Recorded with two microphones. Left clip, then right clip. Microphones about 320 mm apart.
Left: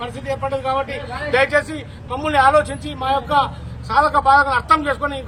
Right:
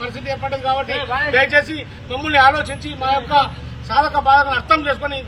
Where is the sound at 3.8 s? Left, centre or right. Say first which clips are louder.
Even; centre.